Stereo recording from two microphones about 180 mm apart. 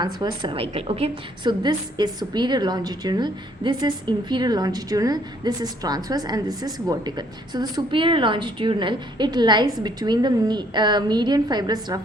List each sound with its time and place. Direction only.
0.0 s a woman's voice: 25° right (ahead or behind)